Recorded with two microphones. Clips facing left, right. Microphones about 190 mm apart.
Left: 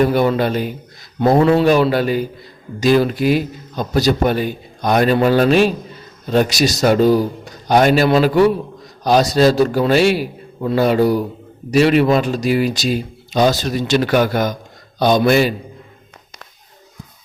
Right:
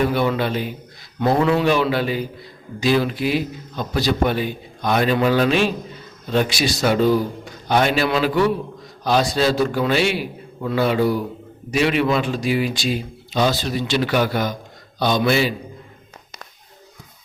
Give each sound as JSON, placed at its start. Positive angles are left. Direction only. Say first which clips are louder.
{"t": 0.0, "sound": "a man's voice", "louder": "left 5 dB", "side_deg": 40}